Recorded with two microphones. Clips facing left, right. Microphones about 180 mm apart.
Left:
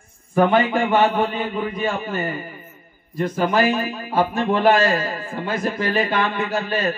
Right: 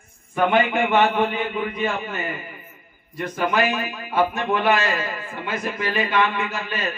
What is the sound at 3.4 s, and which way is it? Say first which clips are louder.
A man's voice: left 2 dB; 30° left (ahead or behind).